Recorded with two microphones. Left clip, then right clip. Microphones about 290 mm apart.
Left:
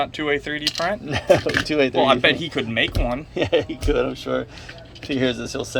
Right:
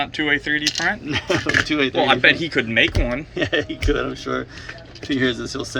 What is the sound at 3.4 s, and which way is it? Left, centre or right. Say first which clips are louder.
Speech: left 2 dB; left.